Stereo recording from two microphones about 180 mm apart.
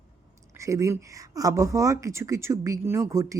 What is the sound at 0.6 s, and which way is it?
Speech, 15° right (ahead or behind).